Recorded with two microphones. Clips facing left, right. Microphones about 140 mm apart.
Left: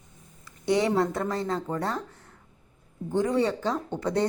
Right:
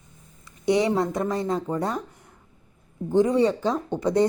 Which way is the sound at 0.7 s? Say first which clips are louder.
Right 2 dB; 20° right (ahead or behind).